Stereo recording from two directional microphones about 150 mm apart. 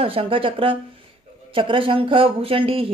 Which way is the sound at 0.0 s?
40° right (ahead or behind).